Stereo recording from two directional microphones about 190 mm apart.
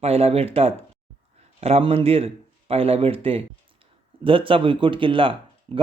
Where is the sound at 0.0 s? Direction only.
30° right (ahead or behind).